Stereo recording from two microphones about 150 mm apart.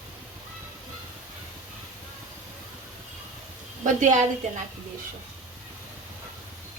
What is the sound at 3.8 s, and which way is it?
Speech, 55° right (ahead or behind).